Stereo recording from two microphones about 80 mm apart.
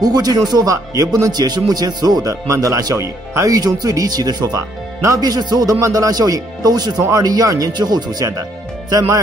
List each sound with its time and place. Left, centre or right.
0.0 s speech: right
2.4 s speech: right
7.7 s speech: right